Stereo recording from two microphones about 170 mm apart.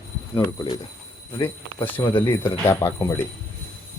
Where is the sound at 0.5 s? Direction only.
30° left (ahead or behind).